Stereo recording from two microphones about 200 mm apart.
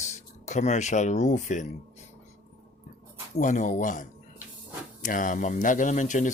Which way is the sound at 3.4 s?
40° left (ahead or behind).